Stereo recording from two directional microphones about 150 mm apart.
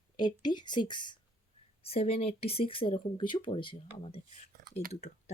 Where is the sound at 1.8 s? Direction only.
40° left (ahead or behind).